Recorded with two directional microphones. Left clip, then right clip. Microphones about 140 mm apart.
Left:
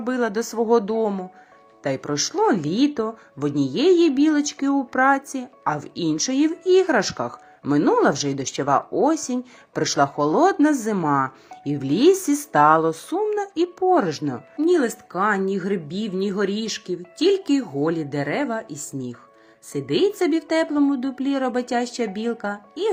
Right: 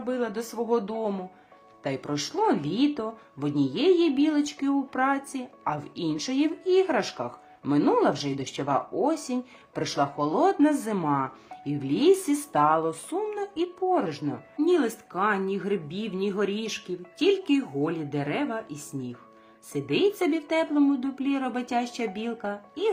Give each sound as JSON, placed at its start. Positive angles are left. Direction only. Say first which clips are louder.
{"t": 0.0, "sound": "speech", "louder": "left 6 dB", "side_deg": 40}